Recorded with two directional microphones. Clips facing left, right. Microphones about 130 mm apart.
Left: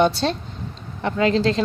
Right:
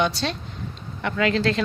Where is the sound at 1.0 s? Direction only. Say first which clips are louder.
Left 3 dB; 30° left (ahead or behind).